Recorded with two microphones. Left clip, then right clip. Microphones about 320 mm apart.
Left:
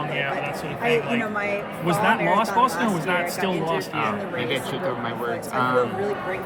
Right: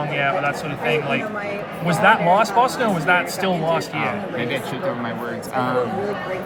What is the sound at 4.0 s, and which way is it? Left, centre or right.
Speech, centre.